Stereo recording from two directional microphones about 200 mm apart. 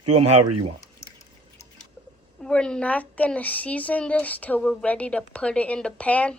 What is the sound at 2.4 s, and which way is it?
Speech, 5° left (ahead or behind).